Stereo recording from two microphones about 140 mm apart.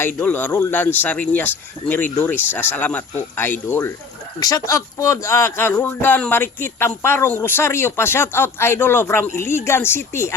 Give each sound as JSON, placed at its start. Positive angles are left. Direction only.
{"t": 0.2, "sound": "speech", "side_deg": 15}